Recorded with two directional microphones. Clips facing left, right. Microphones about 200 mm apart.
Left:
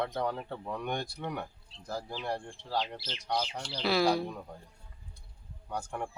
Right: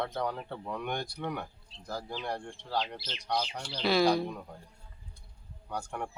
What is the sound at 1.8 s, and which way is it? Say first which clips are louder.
Speech: left 1 dB; 5° left (ahead or behind).